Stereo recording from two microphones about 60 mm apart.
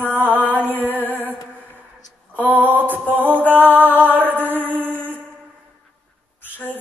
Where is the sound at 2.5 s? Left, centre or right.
Right.